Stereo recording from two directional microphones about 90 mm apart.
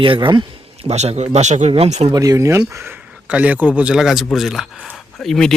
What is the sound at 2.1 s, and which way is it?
Speech, 40° right (ahead or behind).